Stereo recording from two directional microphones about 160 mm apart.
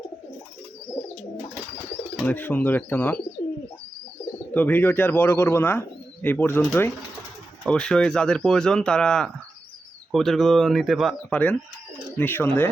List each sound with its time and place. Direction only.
2.1 s speech: 10° left (ahead or behind)
4.5 s speech: 10° left (ahead or behind)